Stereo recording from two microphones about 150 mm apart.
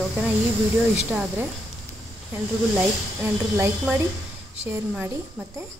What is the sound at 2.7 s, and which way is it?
Speech, 15° right (ahead or behind).